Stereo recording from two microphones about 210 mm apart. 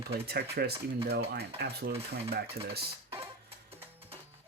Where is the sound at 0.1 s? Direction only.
50° right (ahead or behind).